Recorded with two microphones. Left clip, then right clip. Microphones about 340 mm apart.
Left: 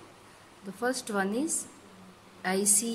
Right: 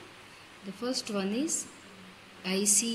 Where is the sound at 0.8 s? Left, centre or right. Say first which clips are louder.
Left 3 dB; left.